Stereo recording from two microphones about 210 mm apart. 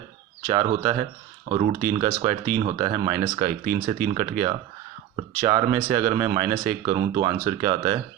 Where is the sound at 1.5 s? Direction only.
35° right (ahead or behind).